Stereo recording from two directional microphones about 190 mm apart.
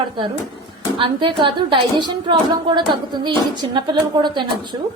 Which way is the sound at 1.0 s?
25° right (ahead or behind).